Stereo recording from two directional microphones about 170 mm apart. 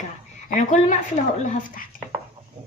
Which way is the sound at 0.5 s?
50° left (ahead or behind).